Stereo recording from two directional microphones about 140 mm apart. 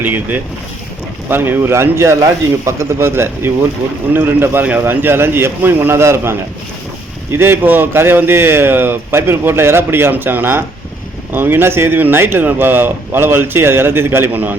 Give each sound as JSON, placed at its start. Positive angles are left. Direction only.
{"t": 0.0, "sound": "speech", "side_deg": -10}